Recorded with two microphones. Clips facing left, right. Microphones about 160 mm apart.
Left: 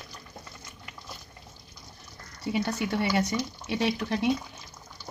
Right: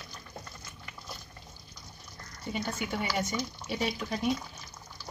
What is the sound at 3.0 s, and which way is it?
Speech, 75° left (ahead or behind).